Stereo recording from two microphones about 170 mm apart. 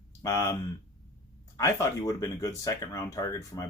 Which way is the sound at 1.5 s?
20° left (ahead or behind).